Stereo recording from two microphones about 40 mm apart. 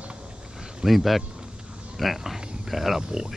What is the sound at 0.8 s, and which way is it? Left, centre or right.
Speech, centre.